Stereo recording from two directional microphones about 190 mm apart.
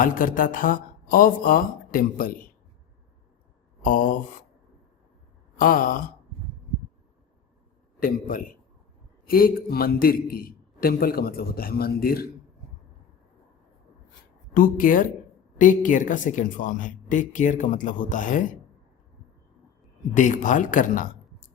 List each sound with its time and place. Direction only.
0.0 s a man's voice: 45° left (ahead or behind)
3.8 s a man's voice: 45° left (ahead or behind)
5.5 s a man's voice: 45° left (ahead or behind)
7.9 s a man's voice: 50° left (ahead or behind)
14.5 s a man's voice: 45° left (ahead or behind)
20.1 s speech: 40° left (ahead or behind)